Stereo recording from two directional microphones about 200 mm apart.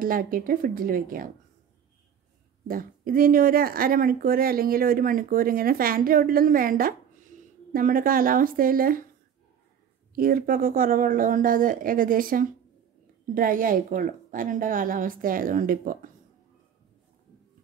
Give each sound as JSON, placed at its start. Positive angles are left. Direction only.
{"t": 0.0, "sound": "speech", "side_deg": -45}
{"t": 2.7, "sound": "speech", "side_deg": -45}
{"t": 10.1, "sound": "speech", "side_deg": -50}